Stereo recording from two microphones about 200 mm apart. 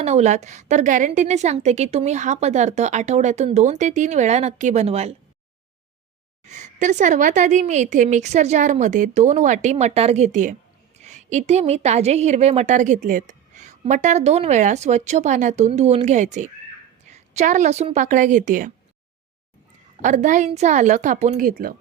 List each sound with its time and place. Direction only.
0.0 s a woman's voice: 35° right (ahead or behind)
6.4 s a woman's voice: 35° right (ahead or behind)
20.0 s a woman's voice: 40° right (ahead or behind)